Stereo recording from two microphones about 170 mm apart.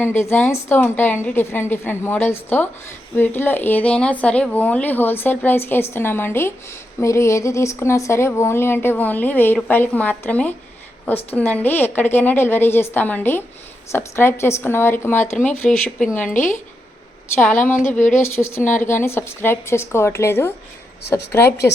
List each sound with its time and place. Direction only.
0.0 s speech: 15° left (ahead or behind)